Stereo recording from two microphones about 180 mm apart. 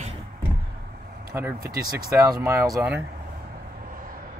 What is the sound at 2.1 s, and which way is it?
Speech, 20° right (ahead or behind).